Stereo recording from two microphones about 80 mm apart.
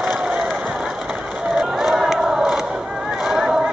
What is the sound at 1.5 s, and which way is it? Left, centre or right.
Crowd, centre.